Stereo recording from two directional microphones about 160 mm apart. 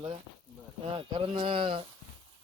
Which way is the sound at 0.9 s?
35° right (ahead or behind).